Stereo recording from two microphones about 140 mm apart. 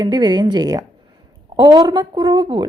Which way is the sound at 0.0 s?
30° right (ahead or behind).